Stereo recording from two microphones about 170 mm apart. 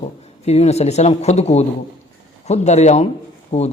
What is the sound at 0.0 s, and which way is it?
Speech, 40° left (ahead or behind).